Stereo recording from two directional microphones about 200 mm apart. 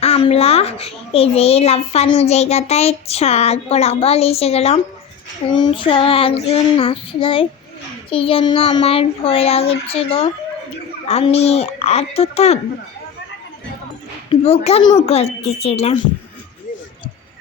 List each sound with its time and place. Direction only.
0.0 s a child's voice: 30° left (ahead or behind)
14.3 s a child's voice: 30° left (ahead or behind)